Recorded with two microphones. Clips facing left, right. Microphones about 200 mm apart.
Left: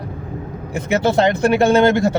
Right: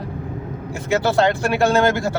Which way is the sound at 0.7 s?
20° left (ahead or behind).